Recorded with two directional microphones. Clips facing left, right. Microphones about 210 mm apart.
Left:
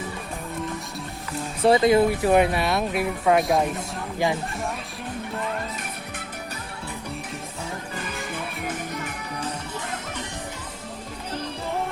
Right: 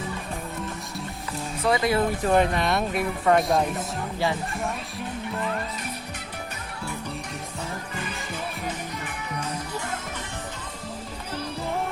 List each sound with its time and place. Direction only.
1.6 s speech: 25° left (ahead or behind)
2.0 s speech: 10° left (ahead or behind)